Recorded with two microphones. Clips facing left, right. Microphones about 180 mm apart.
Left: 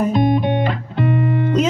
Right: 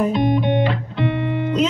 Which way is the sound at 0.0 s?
45° left (ahead or behind).